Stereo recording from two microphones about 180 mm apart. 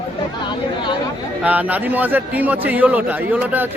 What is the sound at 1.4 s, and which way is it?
A man's voice, 10° right (ahead or behind).